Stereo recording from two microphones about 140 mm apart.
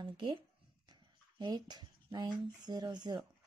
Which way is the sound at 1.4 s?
30° right (ahead or behind).